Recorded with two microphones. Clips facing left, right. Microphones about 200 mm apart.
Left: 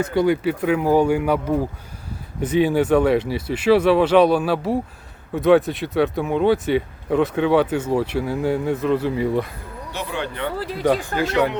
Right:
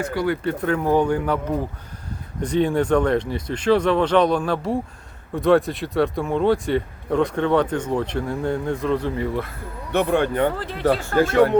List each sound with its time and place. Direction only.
0.0 s speech: 20° left (ahead or behind)
0.4 s speech: 10° left (ahead or behind)
9.2 s speech: 15° left (ahead or behind)
9.9 s speech: 55° right (ahead or behind)
10.6 s speech: 10° left (ahead or behind)
11.2 s speech: 50° right (ahead or behind)